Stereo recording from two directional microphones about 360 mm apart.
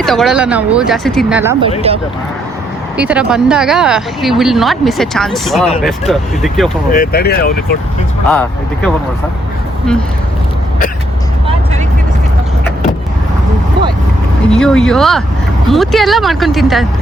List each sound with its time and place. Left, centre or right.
0.0 s speech: centre
3.0 s speech: centre
6.9 s speech: left
8.3 s speech: centre
14.5 s speech: centre